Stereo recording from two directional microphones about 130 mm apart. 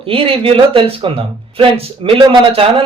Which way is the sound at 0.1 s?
45° right (ahead or behind).